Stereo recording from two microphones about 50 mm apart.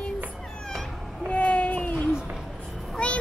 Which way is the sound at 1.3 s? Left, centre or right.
Left.